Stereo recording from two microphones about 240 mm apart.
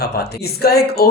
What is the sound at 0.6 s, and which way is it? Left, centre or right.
Speech, left.